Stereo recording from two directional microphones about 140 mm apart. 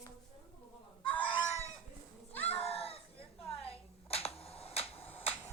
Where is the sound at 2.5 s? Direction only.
45° left (ahead or behind).